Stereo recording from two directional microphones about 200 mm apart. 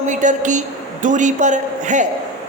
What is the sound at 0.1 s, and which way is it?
A woman's voice, 40° right (ahead or behind).